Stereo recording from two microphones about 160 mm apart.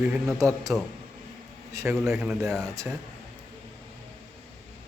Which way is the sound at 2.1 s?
5° right (ahead or behind).